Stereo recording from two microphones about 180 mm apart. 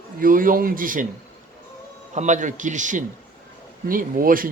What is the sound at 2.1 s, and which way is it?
A man's voice, 40° right (ahead or behind).